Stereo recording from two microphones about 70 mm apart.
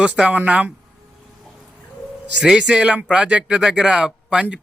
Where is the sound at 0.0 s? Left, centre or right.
Centre.